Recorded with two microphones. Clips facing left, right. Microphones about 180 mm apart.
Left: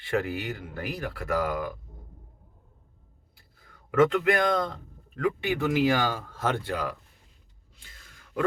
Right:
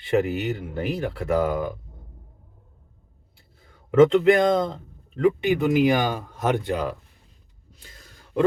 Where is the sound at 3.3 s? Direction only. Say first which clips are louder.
Right 3 dB; 25° right (ahead or behind).